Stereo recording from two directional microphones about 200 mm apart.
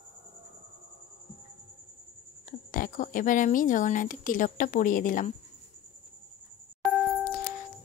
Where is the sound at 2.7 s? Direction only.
40° left (ahead or behind).